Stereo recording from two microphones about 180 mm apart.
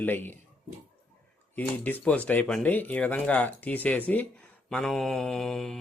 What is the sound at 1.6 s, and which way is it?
Speech, 5° left (ahead or behind).